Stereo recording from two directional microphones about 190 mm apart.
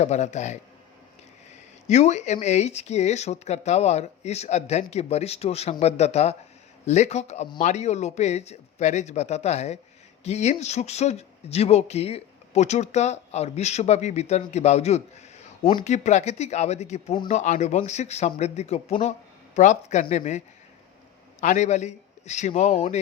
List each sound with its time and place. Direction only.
0.0 s speech: 35° left (ahead or behind)
1.9 s speech: 35° left (ahead or behind)
21.4 s speech: 40° left (ahead or behind)